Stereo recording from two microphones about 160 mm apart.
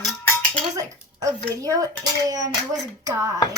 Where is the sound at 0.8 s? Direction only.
20° right (ahead or behind).